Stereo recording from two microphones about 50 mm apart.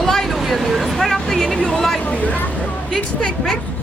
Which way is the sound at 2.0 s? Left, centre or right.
Left.